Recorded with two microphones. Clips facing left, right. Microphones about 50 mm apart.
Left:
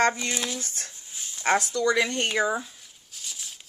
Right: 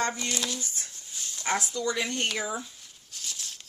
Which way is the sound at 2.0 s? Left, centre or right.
Left.